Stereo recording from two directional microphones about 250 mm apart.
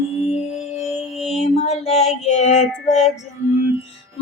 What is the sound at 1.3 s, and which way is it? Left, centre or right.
Child singing, left.